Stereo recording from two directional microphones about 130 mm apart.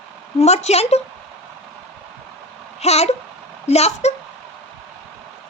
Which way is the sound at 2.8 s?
55° left (ahead or behind).